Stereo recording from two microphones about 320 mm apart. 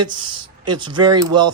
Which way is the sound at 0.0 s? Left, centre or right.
Centre.